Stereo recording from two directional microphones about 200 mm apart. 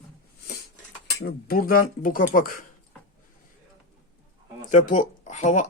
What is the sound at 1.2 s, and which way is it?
Speech, 50° left (ahead or behind).